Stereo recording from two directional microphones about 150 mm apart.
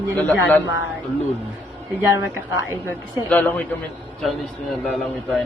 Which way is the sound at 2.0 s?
25° right (ahead or behind).